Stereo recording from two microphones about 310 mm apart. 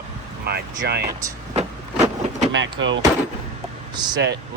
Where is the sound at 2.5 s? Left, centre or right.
Right.